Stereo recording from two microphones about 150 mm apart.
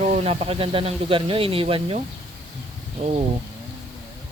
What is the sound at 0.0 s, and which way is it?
Speech, 45° right (ahead or behind).